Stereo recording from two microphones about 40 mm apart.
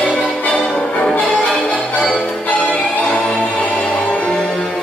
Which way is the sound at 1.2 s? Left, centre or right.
Left.